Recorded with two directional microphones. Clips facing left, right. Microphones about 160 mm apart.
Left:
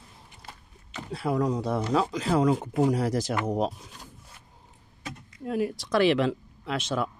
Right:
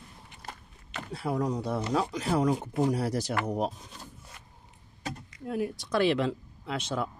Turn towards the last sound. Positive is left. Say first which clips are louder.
# left 3 dB
turn(degrees=90)